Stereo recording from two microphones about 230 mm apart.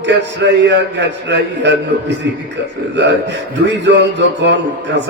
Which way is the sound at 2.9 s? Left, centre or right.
Right.